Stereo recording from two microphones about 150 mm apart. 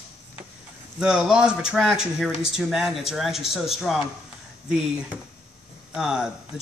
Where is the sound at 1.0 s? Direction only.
5° right (ahead or behind).